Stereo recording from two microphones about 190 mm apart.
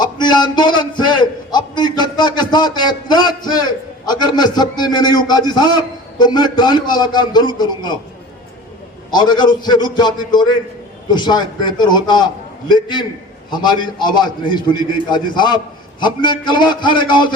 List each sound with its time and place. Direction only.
0.0 s a sound: 25° left (ahead or behind)
6.1 s a man's voice: 20° left (ahead or behind)
9.0 s a man's voice: 20° left (ahead or behind)